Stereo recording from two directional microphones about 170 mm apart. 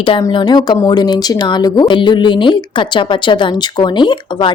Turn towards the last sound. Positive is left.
turn(degrees=30)  # may be behind; listen again after turning